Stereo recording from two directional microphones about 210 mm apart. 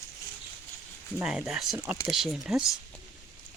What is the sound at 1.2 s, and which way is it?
Speech, 5° right (ahead or behind).